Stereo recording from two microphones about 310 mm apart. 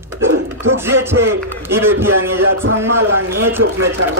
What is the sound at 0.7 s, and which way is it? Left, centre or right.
A man's voice, centre.